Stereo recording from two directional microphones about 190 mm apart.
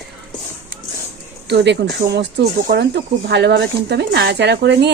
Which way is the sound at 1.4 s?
65° right (ahead or behind).